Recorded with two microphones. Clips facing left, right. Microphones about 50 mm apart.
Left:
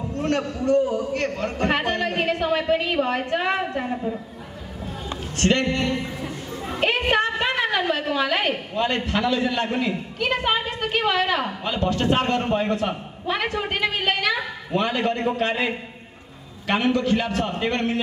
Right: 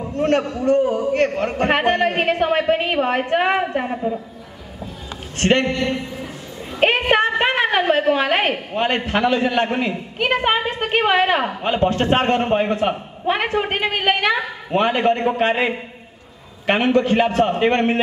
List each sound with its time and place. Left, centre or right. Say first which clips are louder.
0.2 s a woman's voice: right 6 dB; right
3.7 s a woman's voice: right 4 dB; right
5.4 s a woman's voice: right 3 dB; right